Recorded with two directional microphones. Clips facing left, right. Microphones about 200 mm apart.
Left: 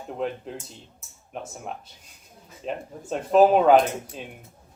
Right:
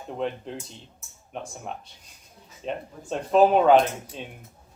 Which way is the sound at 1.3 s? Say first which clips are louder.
Even; centre (ahead or behind).